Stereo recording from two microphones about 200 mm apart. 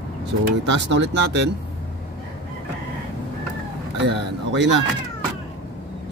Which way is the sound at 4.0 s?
65° right (ahead or behind).